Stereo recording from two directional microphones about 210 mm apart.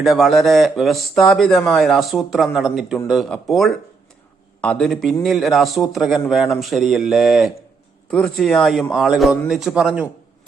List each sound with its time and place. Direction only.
0.0 s speech: centre (ahead or behind)